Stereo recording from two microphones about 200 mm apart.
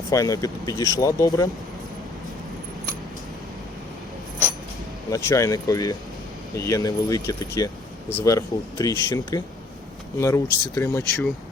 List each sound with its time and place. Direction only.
0.1 s speech: 15° left (ahead or behind)
5.1 s speech: 15° left (ahead or behind)